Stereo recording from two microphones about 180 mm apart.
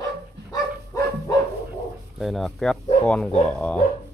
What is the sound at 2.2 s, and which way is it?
Speech, centre (ahead or behind).